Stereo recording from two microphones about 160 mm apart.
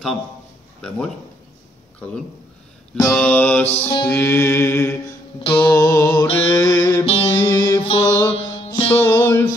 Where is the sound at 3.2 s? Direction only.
10° left (ahead or behind).